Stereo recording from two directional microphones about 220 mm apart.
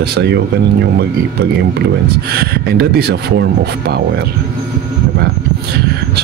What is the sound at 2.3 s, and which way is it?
Speech, 45° right (ahead or behind).